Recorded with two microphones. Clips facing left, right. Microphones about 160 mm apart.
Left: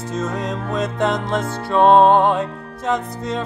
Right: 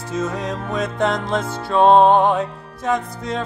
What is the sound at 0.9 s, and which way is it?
Music, 20° left (ahead or behind).